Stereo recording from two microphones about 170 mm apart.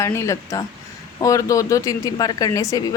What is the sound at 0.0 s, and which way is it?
A woman's voice, 15° left (ahead or behind).